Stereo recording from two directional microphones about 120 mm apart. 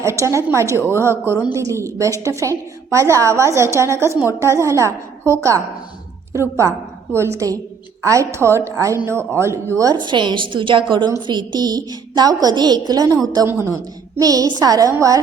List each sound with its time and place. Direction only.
0.0 s a woman's voice: 25° right (ahead or behind)
10.0 s a woman's voice: 40° right (ahead or behind)